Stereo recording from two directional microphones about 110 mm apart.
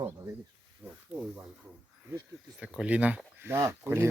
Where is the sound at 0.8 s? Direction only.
15° right (ahead or behind).